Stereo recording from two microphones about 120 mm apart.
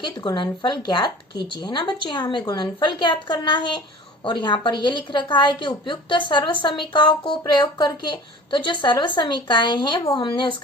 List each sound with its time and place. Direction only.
0.0 s a woman's voice: 40° left (ahead or behind)